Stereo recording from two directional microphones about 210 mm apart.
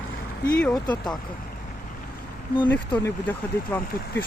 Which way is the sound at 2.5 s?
20° left (ahead or behind).